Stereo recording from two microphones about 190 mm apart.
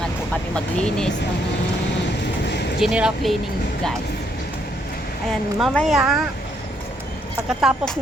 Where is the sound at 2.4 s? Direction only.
60° left (ahead or behind).